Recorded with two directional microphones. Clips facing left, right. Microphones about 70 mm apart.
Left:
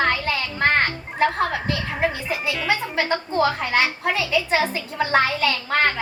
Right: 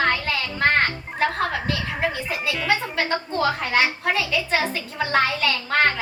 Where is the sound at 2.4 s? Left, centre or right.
Centre.